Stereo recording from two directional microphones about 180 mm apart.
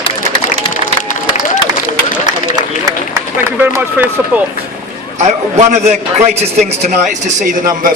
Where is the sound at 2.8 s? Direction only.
15° right (ahead or behind).